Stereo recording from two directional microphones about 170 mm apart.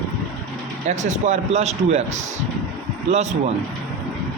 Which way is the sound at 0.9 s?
45° right (ahead or behind).